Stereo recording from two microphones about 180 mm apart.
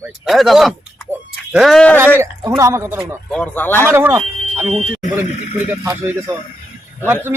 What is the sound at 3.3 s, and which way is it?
Speech, 5° left (ahead or behind).